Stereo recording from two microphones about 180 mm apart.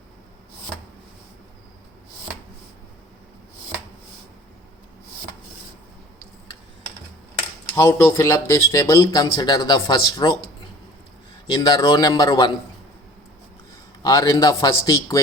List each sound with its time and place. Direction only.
7.8 s speech: 15° left (ahead or behind)
11.5 s speech: 25° left (ahead or behind)
14.0 s speech: 20° left (ahead or behind)